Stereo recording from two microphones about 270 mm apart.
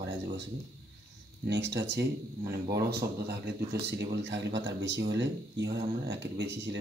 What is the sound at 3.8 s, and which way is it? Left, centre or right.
Speech, right.